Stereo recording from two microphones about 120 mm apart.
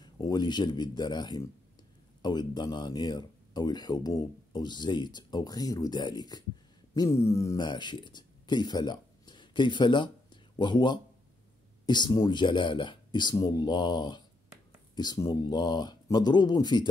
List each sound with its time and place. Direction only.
0.0 s speech: 35° left (ahead or behind)
7.0 s a sound: 25° left (ahead or behind)
7.6 s speech: 40° left (ahead or behind)